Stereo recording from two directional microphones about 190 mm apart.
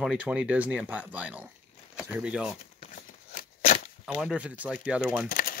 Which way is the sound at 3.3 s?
45° left (ahead or behind).